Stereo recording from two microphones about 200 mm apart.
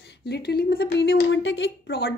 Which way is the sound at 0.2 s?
55° left (ahead or behind).